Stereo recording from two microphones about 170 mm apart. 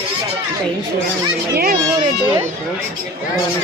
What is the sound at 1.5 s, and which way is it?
Speech, 60° right (ahead or behind).